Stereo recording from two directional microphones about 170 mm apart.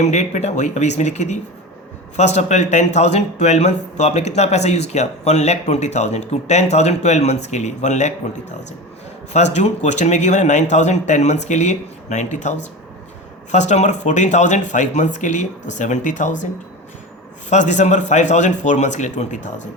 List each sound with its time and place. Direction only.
0.0 s a man's voice: 40° left (ahead or behind)
9.3 s a man's voice: 40° left (ahead or behind)
17.5 s a man's voice: 45° left (ahead or behind)